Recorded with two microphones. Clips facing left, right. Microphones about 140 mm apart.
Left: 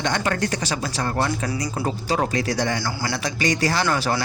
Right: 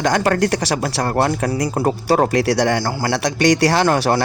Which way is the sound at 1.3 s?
55° right (ahead or behind).